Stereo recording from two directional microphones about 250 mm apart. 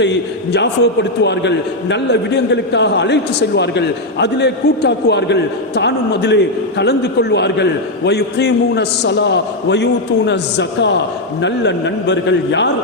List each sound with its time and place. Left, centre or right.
0.5 s a man's voice: left